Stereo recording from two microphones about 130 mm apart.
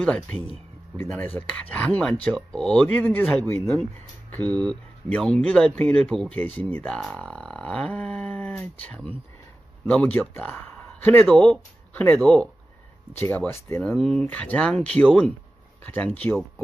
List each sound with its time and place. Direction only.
0.0 s a man's voice: 10° left (ahead or behind)
11.2 s speech: 5° left (ahead or behind)
11.9 s speech: 15° left (ahead or behind)
13.9 s speech: 5° left (ahead or behind)